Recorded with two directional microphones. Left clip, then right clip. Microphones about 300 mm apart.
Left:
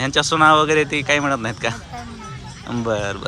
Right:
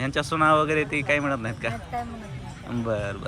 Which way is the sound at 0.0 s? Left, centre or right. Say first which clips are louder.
Left 8 dB; centre.